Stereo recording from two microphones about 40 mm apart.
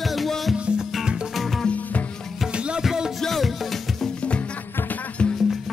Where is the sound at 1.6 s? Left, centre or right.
Left.